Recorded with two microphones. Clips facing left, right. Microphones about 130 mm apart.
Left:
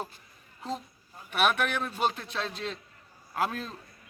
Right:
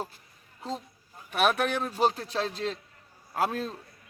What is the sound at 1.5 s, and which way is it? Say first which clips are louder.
Speech: right 2 dB; 35° right (ahead or behind).